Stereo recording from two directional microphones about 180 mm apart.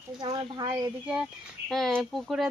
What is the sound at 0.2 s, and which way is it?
Speech, 20° right (ahead or behind).